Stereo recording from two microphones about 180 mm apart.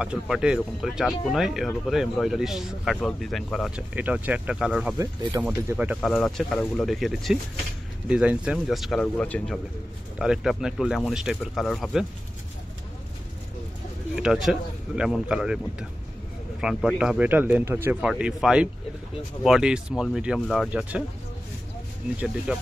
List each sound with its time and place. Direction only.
0.0 s speech: 5° right (ahead or behind)
3.9 s a man's voice: 10° right (ahead or behind)
4.9 s speech: 20° right (ahead or behind)
5.4 s a man's voice: 10° right (ahead or behind)
5.9 s speech: centre (ahead or behind)
10.1 s speech: 5° right (ahead or behind)
14.1 s speech: 5° right (ahead or behind)
16.6 s a man's voice: 5° right (ahead or behind)
22.5 s speech: 5° right (ahead or behind)